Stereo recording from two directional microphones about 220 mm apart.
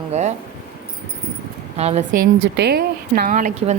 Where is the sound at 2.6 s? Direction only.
50° right (ahead or behind).